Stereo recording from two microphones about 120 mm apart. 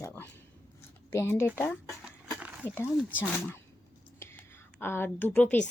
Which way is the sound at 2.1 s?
10° right (ahead or behind).